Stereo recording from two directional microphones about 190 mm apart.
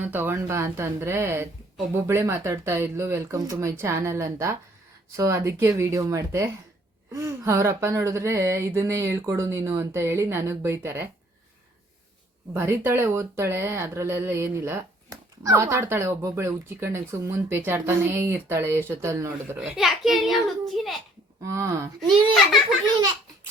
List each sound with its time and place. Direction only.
0.0 s speech: 10° right (ahead or behind)
12.5 s speech: 15° right (ahead or behind)
19.5 s a child's voice: centre (ahead or behind)
21.4 s speech: 15° right (ahead or behind)